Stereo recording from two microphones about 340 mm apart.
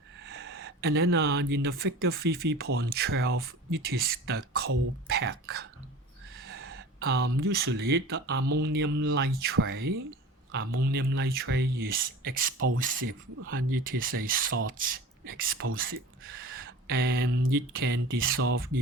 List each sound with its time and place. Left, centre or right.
0.3 s speech: right
8.4 s mantra: right
8.6 s a man's voice: right
12.5 s speech: right
12.8 s speech: right
15.5 s speech: right